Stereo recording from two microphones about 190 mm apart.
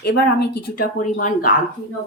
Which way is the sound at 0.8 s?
45° left (ahead or behind).